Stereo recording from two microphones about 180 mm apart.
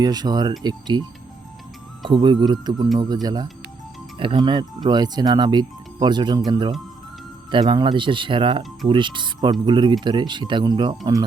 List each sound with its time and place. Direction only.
0.0 s speech: 20° right (ahead or behind)
2.0 s speech: 25° right (ahead or behind)